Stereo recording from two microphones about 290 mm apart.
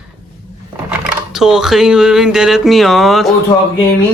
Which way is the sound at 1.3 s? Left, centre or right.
Centre.